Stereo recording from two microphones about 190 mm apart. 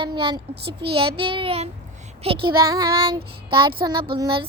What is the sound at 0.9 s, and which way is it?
A child's voice, 30° right (ahead or behind).